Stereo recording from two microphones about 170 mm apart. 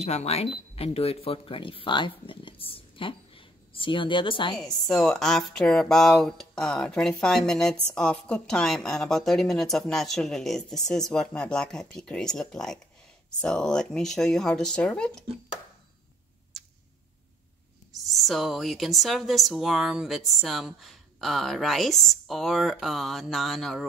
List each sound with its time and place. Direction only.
0.0 s speech: 40° left (ahead or behind)
4.6 s speech: 5° left (ahead or behind)
18.1 s speech: centre (ahead or behind)